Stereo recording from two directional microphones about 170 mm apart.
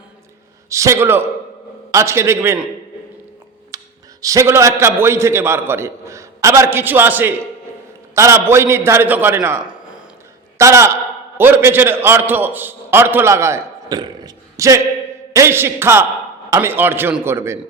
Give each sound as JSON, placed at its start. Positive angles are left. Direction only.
{"t": 0.7, "sound": "a man's voice", "side_deg": -20}
{"t": 3.7, "sound": "a sound", "side_deg": -20}
{"t": 4.2, "sound": "a man's voice", "side_deg": -20}
{"t": 10.6, "sound": "a man's voice", "side_deg": -15}